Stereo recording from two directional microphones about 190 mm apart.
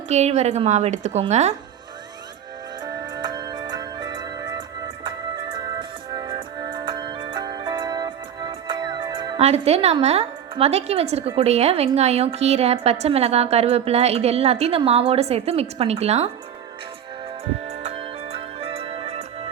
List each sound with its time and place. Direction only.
0.1 s a woman's voice: 35° right (ahead or behind)
2.8 s music: 25° right (ahead or behind)
9.4 s a woman's voice: 35° right (ahead or behind)
17.7 s music: 30° right (ahead or behind)